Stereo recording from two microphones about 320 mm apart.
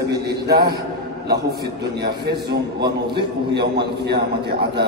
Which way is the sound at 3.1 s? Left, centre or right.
Right.